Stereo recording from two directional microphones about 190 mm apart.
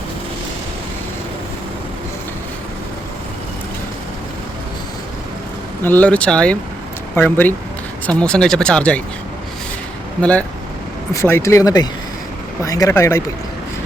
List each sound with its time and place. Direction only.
5.8 s speech: 10° left (ahead or behind)
10.2 s speech: 5° left (ahead or behind)